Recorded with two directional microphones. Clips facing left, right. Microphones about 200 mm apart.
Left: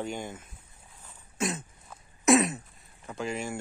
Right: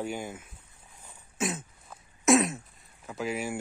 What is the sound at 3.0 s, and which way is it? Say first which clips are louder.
Speech: right 1 dB; 5° right (ahead or behind).